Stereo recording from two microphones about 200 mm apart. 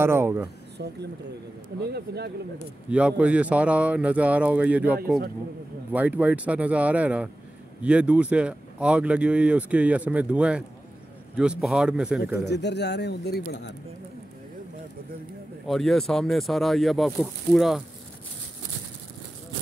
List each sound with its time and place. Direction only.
0.0 s speech: 10° right (ahead or behind)
1.8 s a man's voice: 55° right (ahead or behind)
2.9 s speech: 5° right (ahead or behind)
12.4 s speech: 60° left (ahead or behind)
15.6 s speech: centre (ahead or behind)